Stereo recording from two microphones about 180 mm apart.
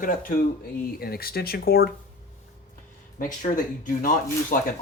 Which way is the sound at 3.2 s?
45° left (ahead or behind).